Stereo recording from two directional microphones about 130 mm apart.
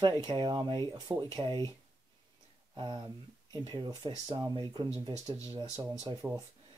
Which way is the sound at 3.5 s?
35° right (ahead or behind).